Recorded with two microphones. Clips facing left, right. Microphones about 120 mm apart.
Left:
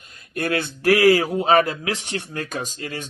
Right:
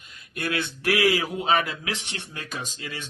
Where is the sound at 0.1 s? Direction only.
40° left (ahead or behind).